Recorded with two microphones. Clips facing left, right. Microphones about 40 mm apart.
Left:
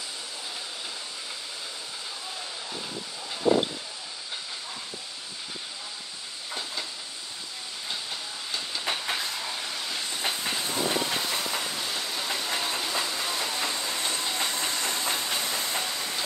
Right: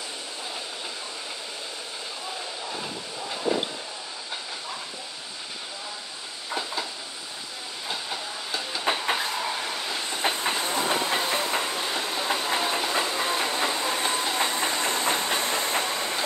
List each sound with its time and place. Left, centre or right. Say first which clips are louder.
6.5 s train: right 5 dB; centre
7.9 s train: right 4 dB; centre
9.4 s train: right 4 dB; right
14.3 s hiss: right 4 dB; right